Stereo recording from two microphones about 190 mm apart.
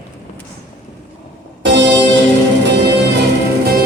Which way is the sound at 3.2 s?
55° right (ahead or behind).